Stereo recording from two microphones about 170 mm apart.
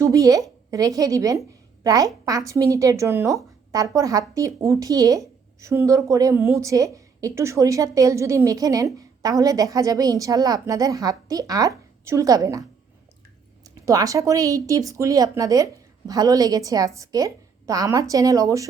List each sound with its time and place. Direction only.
0.0 s a woman's voice: 20° right (ahead or behind)
13.7 s a woman's voice: 20° right (ahead or behind)